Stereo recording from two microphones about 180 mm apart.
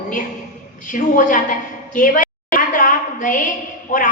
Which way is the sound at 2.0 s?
45° left (ahead or behind).